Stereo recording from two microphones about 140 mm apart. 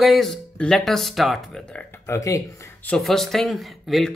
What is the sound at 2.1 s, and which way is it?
Speech, 25° left (ahead or behind).